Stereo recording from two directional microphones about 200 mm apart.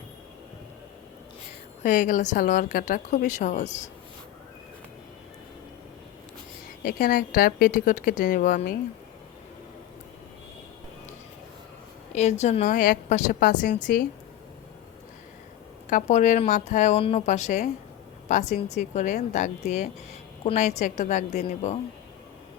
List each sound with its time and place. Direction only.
1.8 s a woman's voice: 40° left (ahead or behind)
6.8 s a woman's voice: 45° left (ahead or behind)
12.1 s a woman's voice: 35° left (ahead or behind)
15.9 s a woman's voice: 40° left (ahead or behind)